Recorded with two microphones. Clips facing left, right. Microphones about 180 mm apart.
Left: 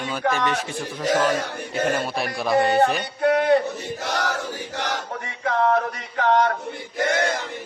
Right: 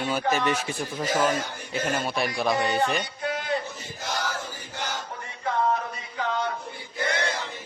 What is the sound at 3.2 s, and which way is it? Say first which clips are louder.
Battle cry: left 16 dB; 65° left (ahead or behind).